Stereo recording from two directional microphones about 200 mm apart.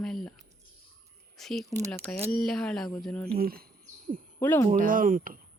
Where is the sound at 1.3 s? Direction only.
Centre (ahead or behind).